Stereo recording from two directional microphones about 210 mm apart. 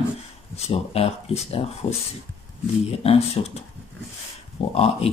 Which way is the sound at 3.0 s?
30° left (ahead or behind).